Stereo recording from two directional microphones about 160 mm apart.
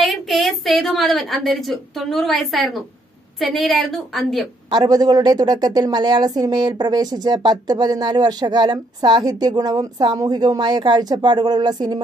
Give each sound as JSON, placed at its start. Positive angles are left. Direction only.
{"t": 0.0, "sound": "a woman's voice", "side_deg": 0}
{"t": 4.6, "sound": "a woman's voice", "side_deg": -25}